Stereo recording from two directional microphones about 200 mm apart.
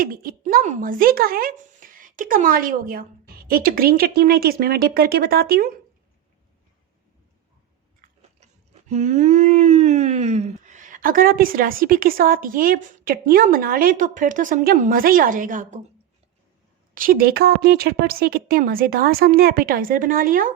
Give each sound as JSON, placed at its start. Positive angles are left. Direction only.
{"t": 0.0, "sound": "speech", "side_deg": -45}
{"t": 8.0, "sound": "chewing", "side_deg": -35}
{"t": 16.9, "sound": "speech", "side_deg": -45}